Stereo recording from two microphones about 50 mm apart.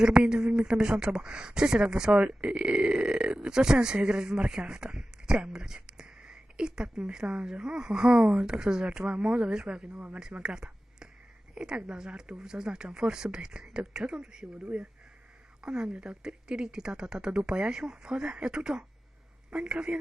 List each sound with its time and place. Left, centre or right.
0.0 s speech: centre
10.3 s a sound: centre
11.5 s speech: centre